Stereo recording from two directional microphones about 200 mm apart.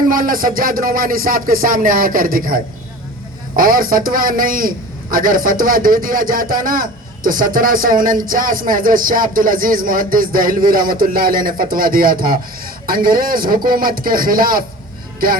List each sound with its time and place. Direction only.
0.1 s speech: 45° right (ahead or behind)